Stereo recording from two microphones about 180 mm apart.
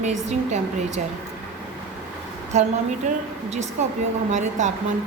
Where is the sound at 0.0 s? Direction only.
40° right (ahead or behind).